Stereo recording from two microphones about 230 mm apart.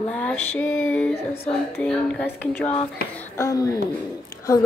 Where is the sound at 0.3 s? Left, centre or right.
Centre.